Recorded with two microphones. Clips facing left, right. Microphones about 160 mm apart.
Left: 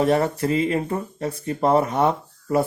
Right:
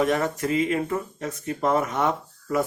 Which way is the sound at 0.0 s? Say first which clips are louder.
Left 3 dB; 30° left (ahead or behind).